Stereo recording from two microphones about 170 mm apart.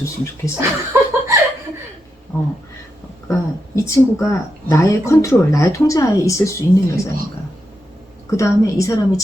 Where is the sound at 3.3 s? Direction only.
15° left (ahead or behind).